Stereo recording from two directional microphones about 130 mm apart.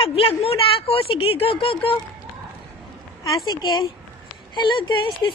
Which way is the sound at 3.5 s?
35° left (ahead or behind).